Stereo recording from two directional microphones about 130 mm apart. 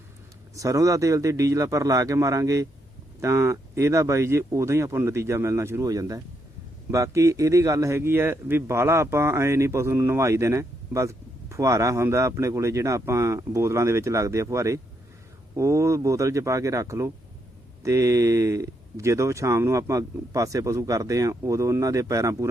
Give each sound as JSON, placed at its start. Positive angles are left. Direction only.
{"t": 0.5, "sound": "speech", "side_deg": -25}